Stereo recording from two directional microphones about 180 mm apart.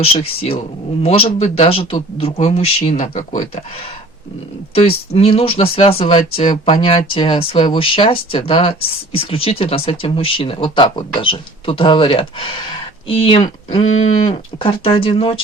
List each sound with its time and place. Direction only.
0.0 s speech: 35° left (ahead or behind)
4.7 s speech: 35° left (ahead or behind)